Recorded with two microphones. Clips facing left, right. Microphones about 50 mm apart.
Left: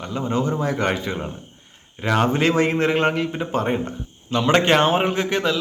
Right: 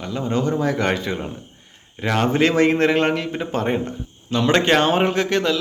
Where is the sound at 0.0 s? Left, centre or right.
Left.